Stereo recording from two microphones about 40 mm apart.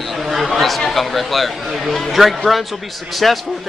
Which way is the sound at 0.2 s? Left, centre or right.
Centre.